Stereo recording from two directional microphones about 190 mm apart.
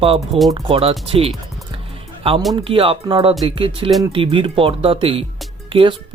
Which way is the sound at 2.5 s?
30° right (ahead or behind).